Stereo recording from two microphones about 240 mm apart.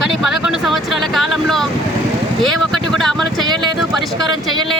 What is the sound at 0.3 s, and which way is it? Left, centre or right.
Speech, centre.